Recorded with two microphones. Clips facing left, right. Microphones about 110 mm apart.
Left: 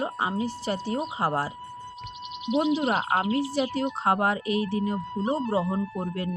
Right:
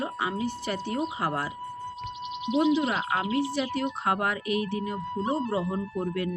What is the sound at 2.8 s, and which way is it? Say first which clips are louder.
Speech: left 3 dB; 45° left (ahead or behind).